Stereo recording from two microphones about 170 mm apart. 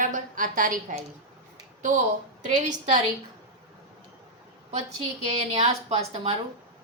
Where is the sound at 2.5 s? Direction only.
45° right (ahead or behind).